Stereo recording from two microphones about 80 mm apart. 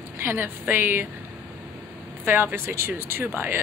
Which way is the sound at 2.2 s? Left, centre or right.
Right.